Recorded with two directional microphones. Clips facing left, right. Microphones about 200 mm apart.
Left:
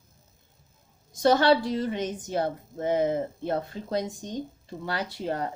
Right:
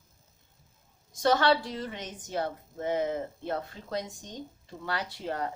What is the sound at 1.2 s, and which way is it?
Speech, 40° left (ahead or behind).